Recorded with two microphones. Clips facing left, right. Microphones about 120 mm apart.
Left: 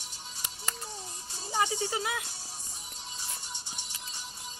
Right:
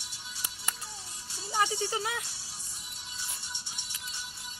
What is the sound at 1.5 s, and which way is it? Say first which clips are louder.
Music: even; 15° left (ahead or behind).